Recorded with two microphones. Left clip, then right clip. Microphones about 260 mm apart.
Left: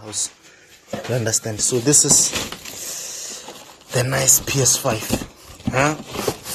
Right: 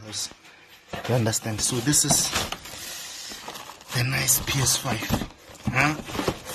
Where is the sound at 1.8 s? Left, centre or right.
Centre.